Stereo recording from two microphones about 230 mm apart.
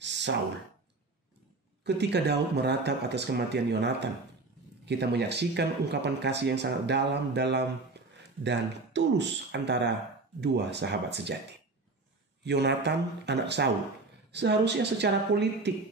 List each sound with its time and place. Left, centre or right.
0.0 s a sound: right
1.9 s speech: right
12.4 s speech: right